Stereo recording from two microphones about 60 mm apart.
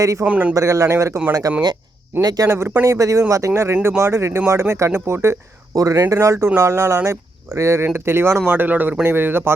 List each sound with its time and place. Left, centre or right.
0.0 s speech: right
0.3 s a man's voice: right
0.5 s speech: right
1.3 s speech: right
2.2 s speech: right
2.5 s speech: right
2.8 s speech: right
3.5 s speech: right
5.7 s speech: right